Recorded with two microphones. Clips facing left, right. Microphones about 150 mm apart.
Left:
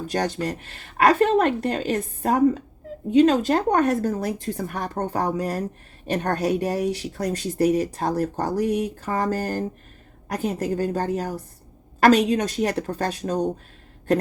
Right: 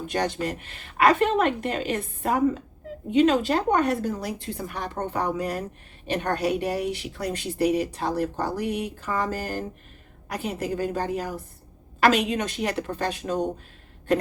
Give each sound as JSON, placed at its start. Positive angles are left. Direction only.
{"t": 0.1, "sound": "speech", "side_deg": 40}